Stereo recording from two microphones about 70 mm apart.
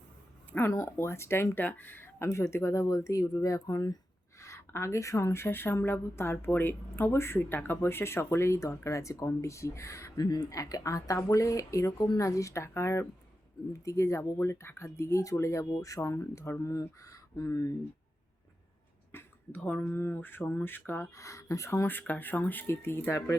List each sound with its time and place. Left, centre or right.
0.5 s speech: left
0.9 s a woman's voice: left
1.5 s a woman's voice: left
10.2 s speech: left
10.5 s speech: left
11.9 s speech: left
14.2 s speech: left
19.1 s speech: left
21.2 s a woman's voice: left
23.1 s a woman's voice: left